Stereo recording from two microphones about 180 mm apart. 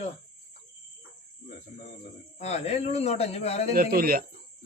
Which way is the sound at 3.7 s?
55° right (ahead or behind).